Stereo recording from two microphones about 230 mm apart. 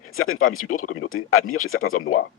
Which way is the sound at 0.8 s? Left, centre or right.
Left.